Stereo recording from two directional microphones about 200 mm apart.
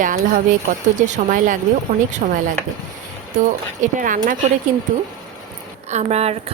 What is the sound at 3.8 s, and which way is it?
Speech, 40° right (ahead or behind).